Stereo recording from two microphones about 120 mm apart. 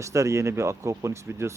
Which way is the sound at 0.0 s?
25° right (ahead or behind).